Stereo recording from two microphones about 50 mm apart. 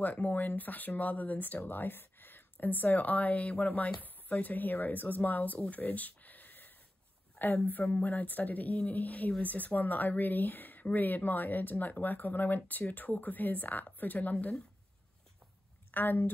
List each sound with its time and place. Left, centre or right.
0.0 s speech: left
5.8 s a sound: left
7.3 s speech: left
15.9 s speech: left